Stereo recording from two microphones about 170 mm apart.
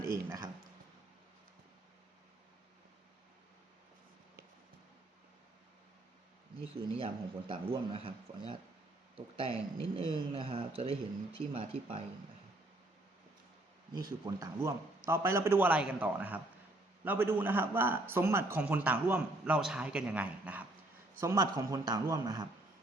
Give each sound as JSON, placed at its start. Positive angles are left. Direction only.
{"t": 0.0, "sound": "a sound", "side_deg": -15}
{"t": 6.7, "sound": "speech", "side_deg": -35}
{"t": 9.1, "sound": "speech", "side_deg": -35}
{"t": 13.9, "sound": "a man's voice", "side_deg": -20}